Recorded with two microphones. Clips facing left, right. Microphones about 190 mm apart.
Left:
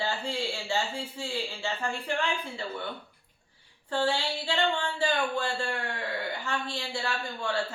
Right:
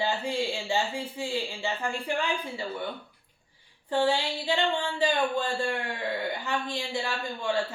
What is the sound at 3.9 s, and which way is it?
A man's voice, 15° right (ahead or behind).